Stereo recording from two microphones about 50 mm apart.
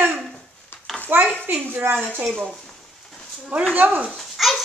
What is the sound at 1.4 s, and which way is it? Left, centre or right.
Speech, right.